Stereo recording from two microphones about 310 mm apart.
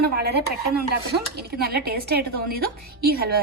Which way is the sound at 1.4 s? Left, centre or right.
Right.